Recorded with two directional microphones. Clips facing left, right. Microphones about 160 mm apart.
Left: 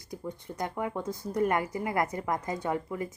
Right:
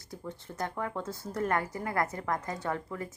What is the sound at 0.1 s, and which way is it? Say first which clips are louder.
A woman's voice: left 3 dB; 15° left (ahead or behind).